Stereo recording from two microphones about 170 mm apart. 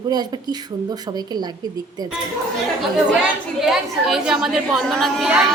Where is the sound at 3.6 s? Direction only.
Centre (ahead or behind).